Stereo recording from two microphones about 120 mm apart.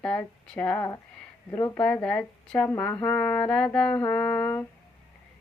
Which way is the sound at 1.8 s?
10° left (ahead or behind).